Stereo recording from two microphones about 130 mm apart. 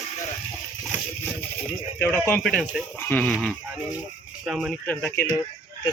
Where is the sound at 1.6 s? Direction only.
15° left (ahead or behind).